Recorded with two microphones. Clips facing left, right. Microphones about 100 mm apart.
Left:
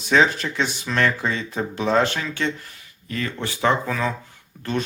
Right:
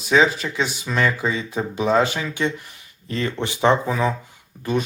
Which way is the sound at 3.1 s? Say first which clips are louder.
Right 3 dB; 25° right (ahead or behind).